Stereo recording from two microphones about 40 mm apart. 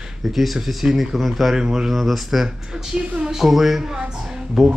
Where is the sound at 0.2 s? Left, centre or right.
Centre.